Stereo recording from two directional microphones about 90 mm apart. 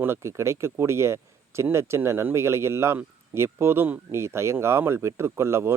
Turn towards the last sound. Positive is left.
turn(degrees=-30)  # may be behind; listen again after turning